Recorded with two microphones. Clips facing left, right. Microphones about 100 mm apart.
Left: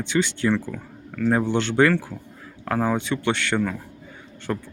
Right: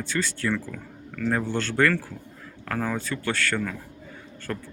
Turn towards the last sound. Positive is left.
turn(degrees=20)  # may be behind; listen again after turning